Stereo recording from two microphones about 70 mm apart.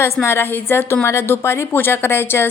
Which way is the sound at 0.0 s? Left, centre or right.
Left.